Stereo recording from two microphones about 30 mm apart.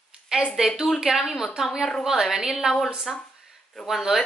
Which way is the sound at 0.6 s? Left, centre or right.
Right.